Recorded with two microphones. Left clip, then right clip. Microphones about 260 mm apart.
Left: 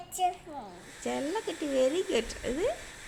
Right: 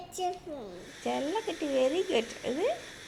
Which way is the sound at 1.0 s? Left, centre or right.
Left.